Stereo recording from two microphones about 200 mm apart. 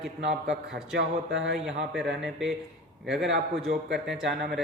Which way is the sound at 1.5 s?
Centre (ahead or behind).